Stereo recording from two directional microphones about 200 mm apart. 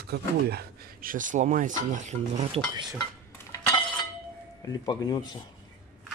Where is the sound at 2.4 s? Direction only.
25° right (ahead or behind).